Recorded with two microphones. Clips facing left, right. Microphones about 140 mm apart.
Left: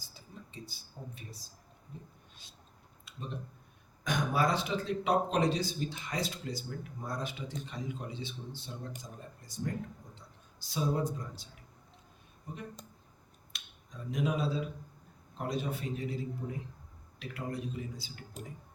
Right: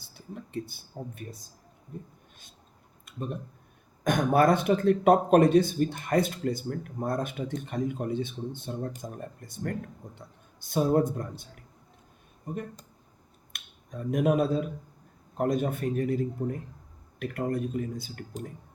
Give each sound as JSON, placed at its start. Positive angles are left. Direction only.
{"t": 0.0, "sound": "speech", "side_deg": -60}
{"t": 3.1, "sound": "speech", "side_deg": -50}